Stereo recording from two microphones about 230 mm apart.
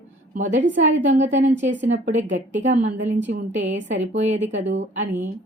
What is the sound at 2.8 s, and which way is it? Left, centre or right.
Speech, right.